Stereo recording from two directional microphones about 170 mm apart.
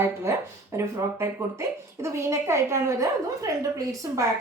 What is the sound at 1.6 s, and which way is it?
A woman's voice, 15° right (ahead or behind).